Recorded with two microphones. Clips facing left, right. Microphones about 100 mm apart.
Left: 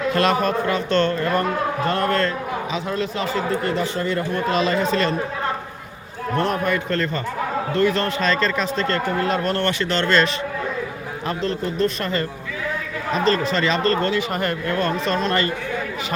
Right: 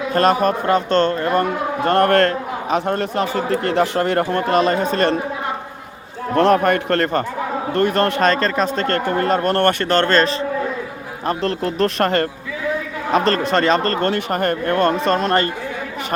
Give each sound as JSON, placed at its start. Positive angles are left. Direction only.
{"t": 0.1, "sound": "a man's voice", "side_deg": -45}
{"t": 1.8, "sound": "a man's voice", "side_deg": -65}
{"t": 3.5, "sound": "speech", "side_deg": -75}
{"t": 6.3, "sound": "speech", "side_deg": -90}
{"t": 11.3, "sound": "a man's voice", "side_deg": -70}